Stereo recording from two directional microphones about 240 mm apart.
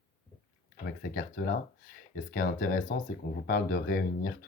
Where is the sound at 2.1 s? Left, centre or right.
Left.